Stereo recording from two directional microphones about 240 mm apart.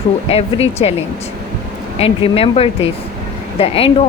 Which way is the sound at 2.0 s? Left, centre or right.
Left.